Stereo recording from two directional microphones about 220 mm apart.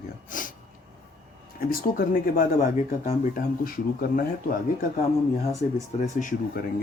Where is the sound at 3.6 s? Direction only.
40° left (ahead or behind).